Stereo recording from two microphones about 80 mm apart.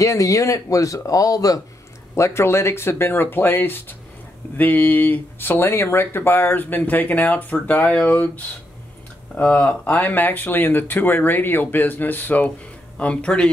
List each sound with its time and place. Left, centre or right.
0.0 s speech: left
2.1 s speech: left; by 13.5 s centre